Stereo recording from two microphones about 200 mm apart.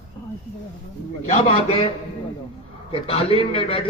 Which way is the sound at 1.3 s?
30° left (ahead or behind).